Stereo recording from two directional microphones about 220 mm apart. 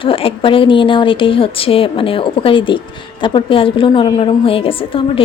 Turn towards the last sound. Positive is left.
turn(degrees=25)  # may be behind; listen again after turning